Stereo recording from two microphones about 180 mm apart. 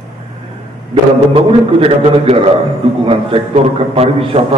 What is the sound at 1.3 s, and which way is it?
A man's voice, 35° right (ahead or behind).